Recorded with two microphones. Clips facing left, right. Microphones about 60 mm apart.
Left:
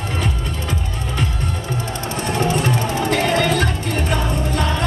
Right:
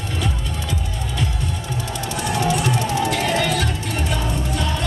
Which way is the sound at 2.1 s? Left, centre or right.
Left.